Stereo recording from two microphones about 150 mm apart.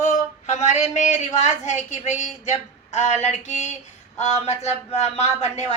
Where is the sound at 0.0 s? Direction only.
50° left (ahead or behind).